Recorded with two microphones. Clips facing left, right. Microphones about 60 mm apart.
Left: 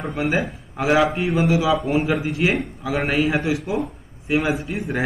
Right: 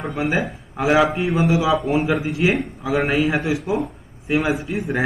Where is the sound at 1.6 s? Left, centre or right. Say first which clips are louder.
Right 1 dB; centre.